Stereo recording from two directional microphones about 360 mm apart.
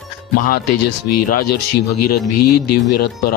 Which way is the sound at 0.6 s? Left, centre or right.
Left.